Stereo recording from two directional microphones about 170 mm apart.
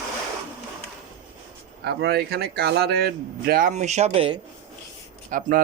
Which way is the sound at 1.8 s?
70° right (ahead or behind).